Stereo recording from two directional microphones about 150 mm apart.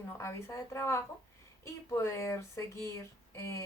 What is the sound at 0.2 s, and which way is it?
A woman's voice, 20° left (ahead or behind).